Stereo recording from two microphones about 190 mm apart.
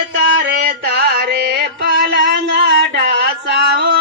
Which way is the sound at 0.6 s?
50° right (ahead or behind).